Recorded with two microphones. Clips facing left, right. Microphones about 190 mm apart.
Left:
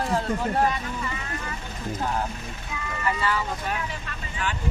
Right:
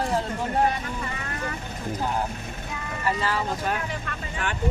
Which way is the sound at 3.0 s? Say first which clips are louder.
Even; 35° right (ahead or behind).